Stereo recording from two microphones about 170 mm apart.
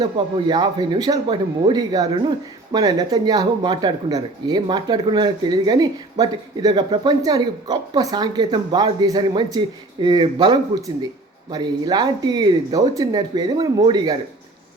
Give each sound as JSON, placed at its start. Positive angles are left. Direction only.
{"t": 0.0, "sound": "speech", "side_deg": -25}